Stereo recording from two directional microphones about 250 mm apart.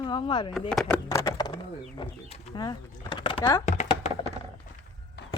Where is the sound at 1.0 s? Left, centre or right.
Centre.